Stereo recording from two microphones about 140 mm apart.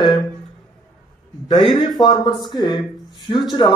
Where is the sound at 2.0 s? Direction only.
30° left (ahead or behind).